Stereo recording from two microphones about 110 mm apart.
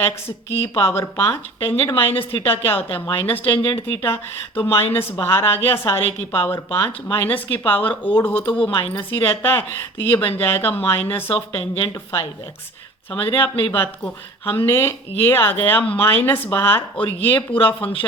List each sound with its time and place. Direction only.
0.6 s a woman's voice: 25° left (ahead or behind)